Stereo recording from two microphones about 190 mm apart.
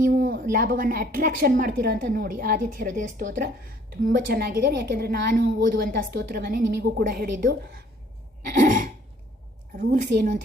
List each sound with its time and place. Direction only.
0.0 s a woman's voice: 50° right (ahead or behind); by 5.8 s 65° right (ahead or behind)
5.8 s a woman's voice: 50° right (ahead or behind)